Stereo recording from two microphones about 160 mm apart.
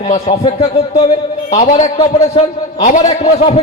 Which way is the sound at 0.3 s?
40° left (ahead or behind).